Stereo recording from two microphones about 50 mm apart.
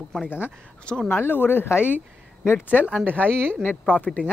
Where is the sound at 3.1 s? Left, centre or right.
Left.